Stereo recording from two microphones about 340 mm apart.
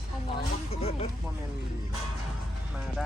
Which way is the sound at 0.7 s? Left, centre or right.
Centre.